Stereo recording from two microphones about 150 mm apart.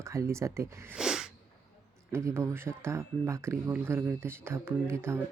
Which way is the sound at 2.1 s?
20° right (ahead or behind).